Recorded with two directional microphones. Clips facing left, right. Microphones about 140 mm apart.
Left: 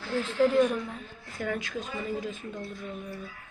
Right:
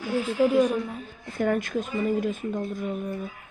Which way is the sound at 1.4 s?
50° right (ahead or behind).